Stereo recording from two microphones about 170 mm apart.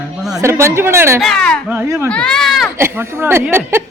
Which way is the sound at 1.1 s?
5° left (ahead or behind).